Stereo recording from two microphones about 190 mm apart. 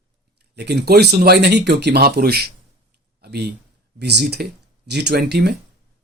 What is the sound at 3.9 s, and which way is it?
Speech, 60° right (ahead or behind).